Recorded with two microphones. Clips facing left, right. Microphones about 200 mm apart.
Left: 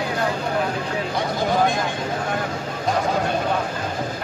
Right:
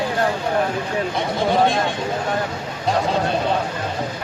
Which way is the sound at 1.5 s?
30° right (ahead or behind).